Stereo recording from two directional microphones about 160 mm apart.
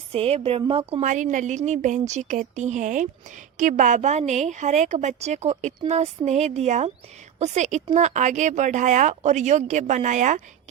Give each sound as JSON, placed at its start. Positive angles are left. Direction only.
{"t": 0.1, "sound": "a woman's voice", "side_deg": -40}